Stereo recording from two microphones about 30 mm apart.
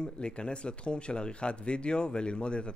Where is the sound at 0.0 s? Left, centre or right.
Left.